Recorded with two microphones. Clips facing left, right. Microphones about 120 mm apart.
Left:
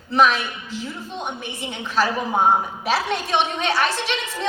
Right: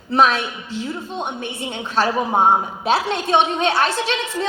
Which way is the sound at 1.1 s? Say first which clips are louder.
Right 3 dB; 30° right (ahead or behind).